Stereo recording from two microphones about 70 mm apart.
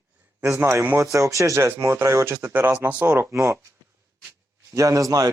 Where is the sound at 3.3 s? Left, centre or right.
Right.